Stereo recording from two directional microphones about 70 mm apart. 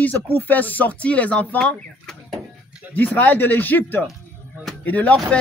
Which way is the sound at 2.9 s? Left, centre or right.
Left.